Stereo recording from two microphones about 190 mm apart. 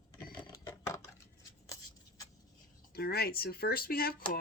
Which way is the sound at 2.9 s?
55° left (ahead or behind).